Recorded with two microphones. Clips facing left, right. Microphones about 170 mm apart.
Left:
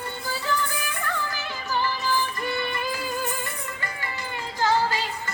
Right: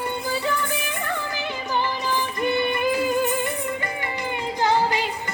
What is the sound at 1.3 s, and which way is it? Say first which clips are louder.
Music: right 3 dB; 20° right (ahead or behind).